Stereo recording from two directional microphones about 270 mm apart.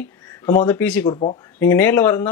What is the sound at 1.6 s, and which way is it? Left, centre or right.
Speech, centre.